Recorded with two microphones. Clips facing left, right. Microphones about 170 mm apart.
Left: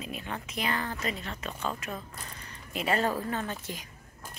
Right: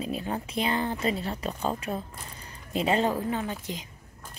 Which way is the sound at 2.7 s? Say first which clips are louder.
Right 3 dB; 20° right (ahead or behind).